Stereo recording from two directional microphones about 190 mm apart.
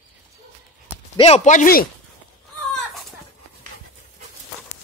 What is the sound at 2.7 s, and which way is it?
Chicken, centre (ahead or behind).